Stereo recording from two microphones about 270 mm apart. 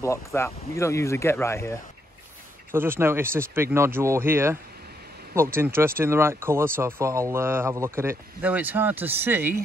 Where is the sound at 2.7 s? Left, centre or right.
Centre.